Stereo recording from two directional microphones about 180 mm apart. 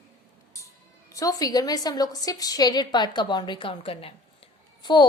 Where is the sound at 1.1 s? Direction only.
20° left (ahead or behind).